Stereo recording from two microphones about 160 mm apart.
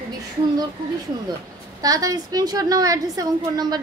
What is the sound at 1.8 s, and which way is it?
A woman's voice, 20° right (ahead or behind).